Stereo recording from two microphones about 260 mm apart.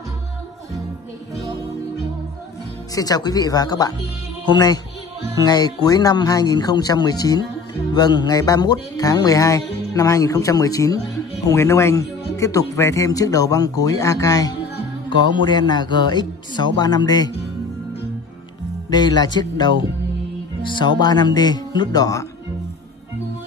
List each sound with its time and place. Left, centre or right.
2.9 s speech: centre
18.9 s speech: centre